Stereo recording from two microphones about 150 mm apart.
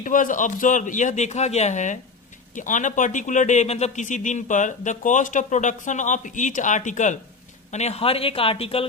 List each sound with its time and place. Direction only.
0.0 s a man's voice: 60° left (ahead or behind); by 8.9 s 40° left (ahead or behind)